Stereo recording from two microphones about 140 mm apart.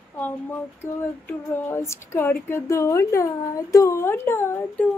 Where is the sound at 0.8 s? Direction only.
20° left (ahead or behind).